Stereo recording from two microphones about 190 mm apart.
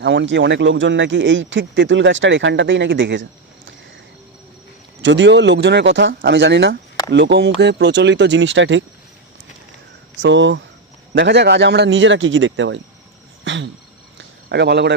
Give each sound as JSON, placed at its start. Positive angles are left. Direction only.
{"t": 0.0, "sound": "speech", "side_deg": -70}
{"t": 5.0, "sound": "speech", "side_deg": -65}
{"t": 10.2, "sound": "speech", "side_deg": -75}
{"t": 13.4, "sound": "a sound", "side_deg": -75}